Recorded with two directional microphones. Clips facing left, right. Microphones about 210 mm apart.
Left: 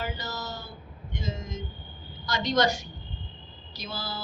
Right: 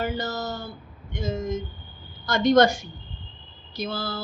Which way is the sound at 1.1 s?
50° right (ahead or behind).